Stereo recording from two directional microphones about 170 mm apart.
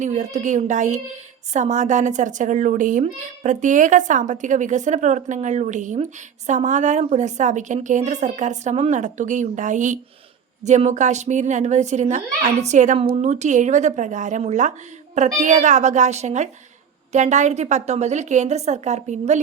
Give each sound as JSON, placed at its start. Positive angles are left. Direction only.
{"t": 0.0, "sound": "speech", "side_deg": -45}